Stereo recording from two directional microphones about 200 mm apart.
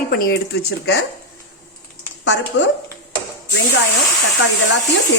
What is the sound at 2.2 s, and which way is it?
Speech, 65° left (ahead or behind).